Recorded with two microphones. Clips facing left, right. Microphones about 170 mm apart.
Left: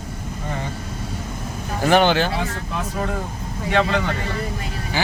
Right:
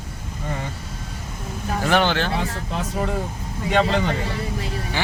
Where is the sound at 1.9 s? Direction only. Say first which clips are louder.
Left 4 dB; 15° left (ahead or behind).